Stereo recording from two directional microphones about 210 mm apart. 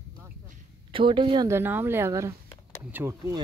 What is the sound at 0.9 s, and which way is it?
A woman's voice, 25° right (ahead or behind).